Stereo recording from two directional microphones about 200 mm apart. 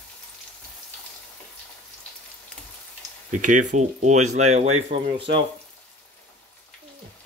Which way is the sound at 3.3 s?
40° right (ahead or behind).